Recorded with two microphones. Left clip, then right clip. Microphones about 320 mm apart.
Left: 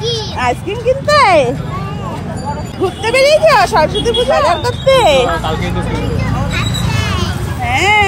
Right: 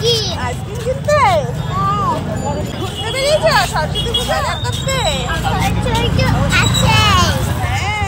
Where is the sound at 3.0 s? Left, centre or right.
Left.